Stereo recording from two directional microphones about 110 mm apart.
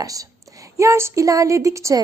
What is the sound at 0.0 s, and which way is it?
A woman's voice, 30° right (ahead or behind).